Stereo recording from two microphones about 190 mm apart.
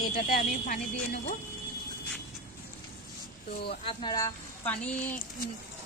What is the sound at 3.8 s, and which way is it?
Speech, 30° left (ahead or behind).